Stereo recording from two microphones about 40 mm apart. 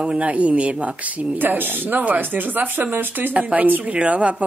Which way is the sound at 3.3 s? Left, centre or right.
Right.